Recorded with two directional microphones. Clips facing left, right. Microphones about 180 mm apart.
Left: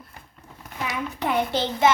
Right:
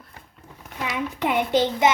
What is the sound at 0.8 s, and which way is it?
Child singing, 20° right (ahead or behind).